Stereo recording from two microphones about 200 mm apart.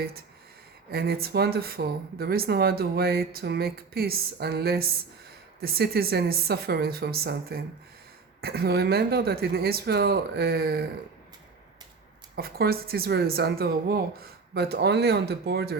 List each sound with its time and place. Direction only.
0.9 s speech: 50° right (ahead or behind)
12.4 s speech: 50° right (ahead or behind)